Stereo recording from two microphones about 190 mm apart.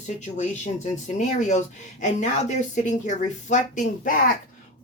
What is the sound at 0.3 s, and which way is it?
Speech, 40° left (ahead or behind).